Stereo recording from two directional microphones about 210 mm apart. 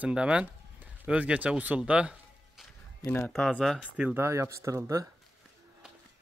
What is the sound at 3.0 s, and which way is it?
Speech, 15° left (ahead or behind).